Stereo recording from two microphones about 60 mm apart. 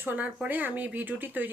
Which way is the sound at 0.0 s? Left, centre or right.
Right.